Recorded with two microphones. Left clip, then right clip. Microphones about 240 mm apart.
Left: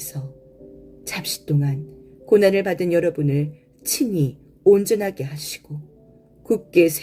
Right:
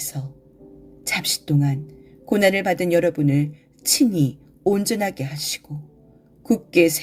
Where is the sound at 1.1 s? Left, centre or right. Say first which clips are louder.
Right 4 dB; right.